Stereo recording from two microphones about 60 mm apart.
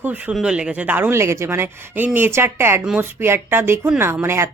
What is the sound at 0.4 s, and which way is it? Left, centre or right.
Speech, centre.